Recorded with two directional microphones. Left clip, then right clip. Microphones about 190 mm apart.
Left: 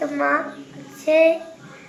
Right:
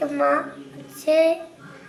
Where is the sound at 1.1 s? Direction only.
10° right (ahead or behind).